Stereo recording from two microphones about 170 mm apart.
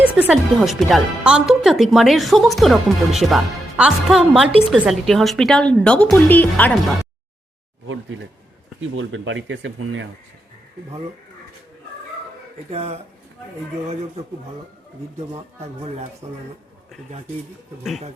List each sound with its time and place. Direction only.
0.0 s speech: 10° right (ahead or behind); by 6.7 s 10° left (ahead or behind)
9.1 s speech: 90° right
12.7 s speech: 40° right (ahead or behind)
15.3 s speech: 35° right (ahead or behind)